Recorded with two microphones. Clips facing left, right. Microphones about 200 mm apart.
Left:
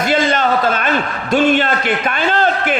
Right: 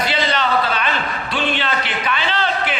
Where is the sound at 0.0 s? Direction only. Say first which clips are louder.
Left 5 dB; 45° left (ahead or behind).